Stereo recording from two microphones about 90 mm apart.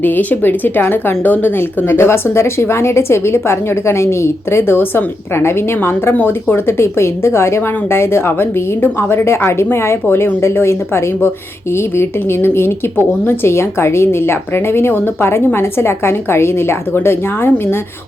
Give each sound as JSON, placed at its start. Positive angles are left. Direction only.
{"t": 0.0, "sound": "a woman's voice", "side_deg": 20}